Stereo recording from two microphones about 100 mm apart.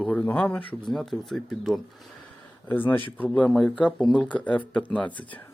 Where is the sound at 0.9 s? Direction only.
Centre (ahead or behind).